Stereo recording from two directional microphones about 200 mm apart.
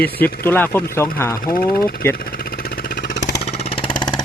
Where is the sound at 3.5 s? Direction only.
30° left (ahead or behind).